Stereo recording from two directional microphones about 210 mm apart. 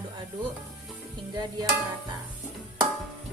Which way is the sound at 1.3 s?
20° right (ahead or behind).